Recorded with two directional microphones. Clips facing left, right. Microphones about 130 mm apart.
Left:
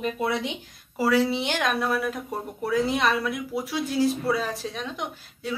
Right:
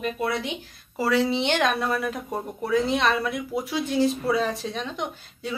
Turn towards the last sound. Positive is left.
turn(degrees=0)  # may be behind; listen again after turning